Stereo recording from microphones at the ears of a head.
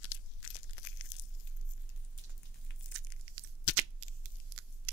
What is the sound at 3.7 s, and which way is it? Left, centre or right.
Scissors, right.